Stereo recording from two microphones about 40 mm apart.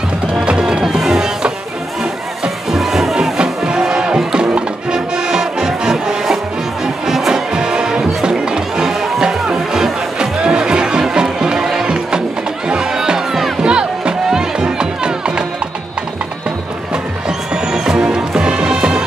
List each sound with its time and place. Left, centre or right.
0.3 s music: right
2.7 s music: centre
3.3 s music: right
17.6 s music: centre